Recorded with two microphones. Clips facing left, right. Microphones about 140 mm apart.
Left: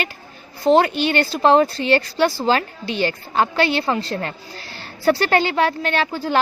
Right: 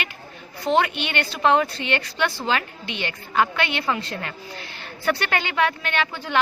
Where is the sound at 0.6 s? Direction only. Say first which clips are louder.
Left 6 dB; 35° left (ahead or behind).